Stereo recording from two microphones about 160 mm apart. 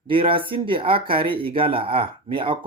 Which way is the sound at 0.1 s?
35° right (ahead or behind).